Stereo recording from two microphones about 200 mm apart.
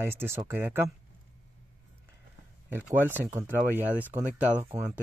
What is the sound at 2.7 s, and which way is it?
Speech, 10° right (ahead or behind).